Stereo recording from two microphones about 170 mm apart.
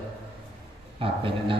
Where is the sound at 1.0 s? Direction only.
30° right (ahead or behind).